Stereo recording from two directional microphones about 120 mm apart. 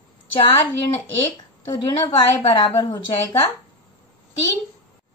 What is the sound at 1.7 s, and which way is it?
Speech, 35° left (ahead or behind).